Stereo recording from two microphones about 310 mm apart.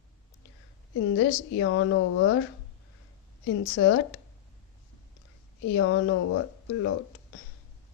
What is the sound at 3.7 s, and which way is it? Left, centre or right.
Speech, left.